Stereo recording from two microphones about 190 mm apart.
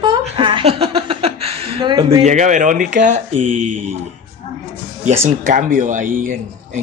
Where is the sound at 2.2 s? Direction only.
40° right (ahead or behind).